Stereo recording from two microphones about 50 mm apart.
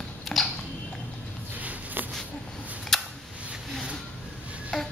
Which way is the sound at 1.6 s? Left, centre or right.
Right.